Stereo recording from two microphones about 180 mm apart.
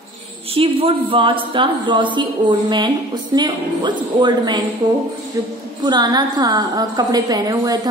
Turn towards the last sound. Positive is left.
turn(degrees=-20)  # may be behind; listen again after turning